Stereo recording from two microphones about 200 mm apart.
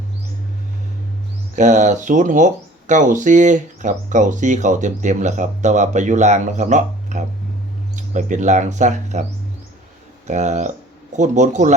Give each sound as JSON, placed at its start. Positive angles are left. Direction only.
{"t": 1.5, "sound": "speech", "side_deg": -35}
{"t": 10.2, "sound": "speech", "side_deg": -35}